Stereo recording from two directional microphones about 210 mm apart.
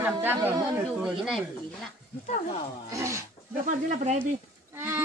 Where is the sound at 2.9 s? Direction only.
15° right (ahead or behind).